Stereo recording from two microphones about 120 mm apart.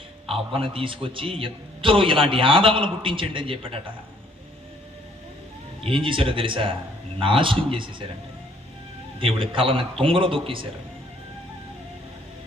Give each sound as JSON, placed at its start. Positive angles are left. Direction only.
{"t": 0.3, "sound": "a man's voice", "side_deg": -50}
{"t": 5.8, "sound": "a man's voice", "side_deg": -45}
{"t": 9.1, "sound": "a man's voice", "side_deg": -45}